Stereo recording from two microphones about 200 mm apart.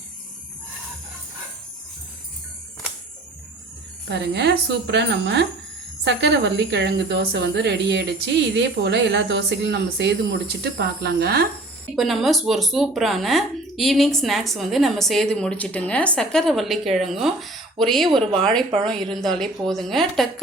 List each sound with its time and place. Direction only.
4.1 s a woman's voice: 60° right (ahead or behind)
11.9 s speech: centre (ahead or behind)
18.1 s speech: 25° right (ahead or behind)
18.3 s speech: 5° left (ahead or behind)